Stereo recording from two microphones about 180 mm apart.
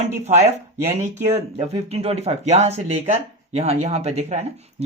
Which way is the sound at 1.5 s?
35° right (ahead or behind).